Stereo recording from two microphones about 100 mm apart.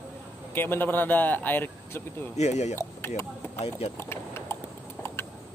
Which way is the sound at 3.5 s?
85° left.